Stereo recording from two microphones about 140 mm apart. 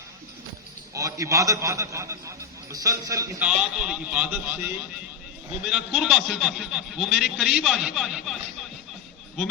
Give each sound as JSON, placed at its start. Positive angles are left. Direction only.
{"t": 0.9, "sound": "a man's voice", "side_deg": -25}
{"t": 3.4, "sound": "a man's voice", "side_deg": -5}